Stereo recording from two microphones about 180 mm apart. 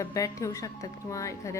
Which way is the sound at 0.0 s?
20° left (ahead or behind).